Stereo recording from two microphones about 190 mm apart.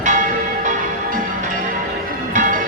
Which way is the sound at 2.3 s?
45° right (ahead or behind).